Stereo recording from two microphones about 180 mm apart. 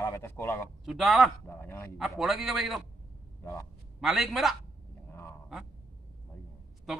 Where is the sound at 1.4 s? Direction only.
10° left (ahead or behind).